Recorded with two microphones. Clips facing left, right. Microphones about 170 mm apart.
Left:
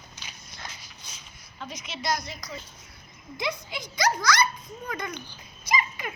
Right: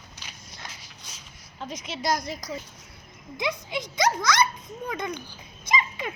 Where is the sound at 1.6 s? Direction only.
40° right (ahead or behind).